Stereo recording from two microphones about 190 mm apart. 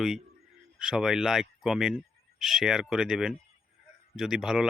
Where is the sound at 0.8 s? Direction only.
5° right (ahead or behind).